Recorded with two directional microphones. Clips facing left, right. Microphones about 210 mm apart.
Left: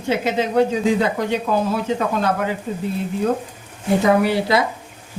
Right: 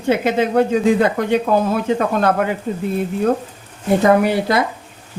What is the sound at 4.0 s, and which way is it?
Speech, 55° right (ahead or behind).